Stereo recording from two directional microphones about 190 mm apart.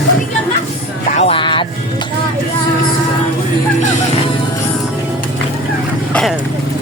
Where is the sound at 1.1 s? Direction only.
35° left (ahead or behind).